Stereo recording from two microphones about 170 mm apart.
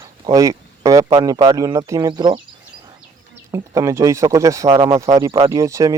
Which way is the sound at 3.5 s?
15° right (ahead or behind).